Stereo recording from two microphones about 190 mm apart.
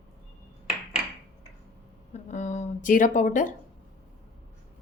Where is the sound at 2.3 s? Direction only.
40° left (ahead or behind).